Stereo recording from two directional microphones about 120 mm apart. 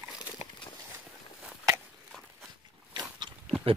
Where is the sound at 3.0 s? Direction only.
40° right (ahead or behind).